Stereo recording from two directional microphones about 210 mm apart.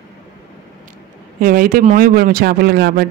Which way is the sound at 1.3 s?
40° right (ahead or behind).